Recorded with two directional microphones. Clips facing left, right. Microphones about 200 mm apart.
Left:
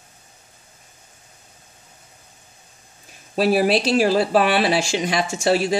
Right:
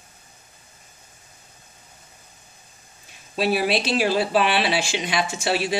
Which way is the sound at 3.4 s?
40° left (ahead or behind).